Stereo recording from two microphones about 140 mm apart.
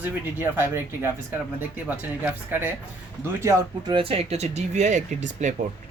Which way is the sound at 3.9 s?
40° right (ahead or behind).